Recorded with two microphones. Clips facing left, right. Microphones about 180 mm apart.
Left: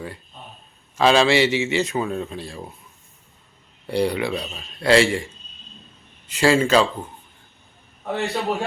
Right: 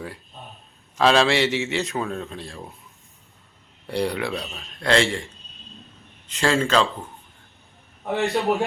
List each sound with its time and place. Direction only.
0.9 s a man's voice: centre (ahead or behind)
3.8 s a man's voice: centre (ahead or behind)
8.3 s a man's voice: 15° right (ahead or behind)